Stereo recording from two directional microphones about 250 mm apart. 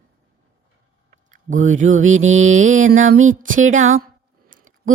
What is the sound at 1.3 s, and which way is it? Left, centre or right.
Speech, right.